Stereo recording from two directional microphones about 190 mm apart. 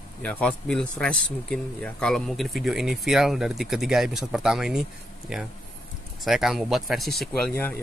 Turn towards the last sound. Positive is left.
turn(degrees=0)  # may be behind; listen again after turning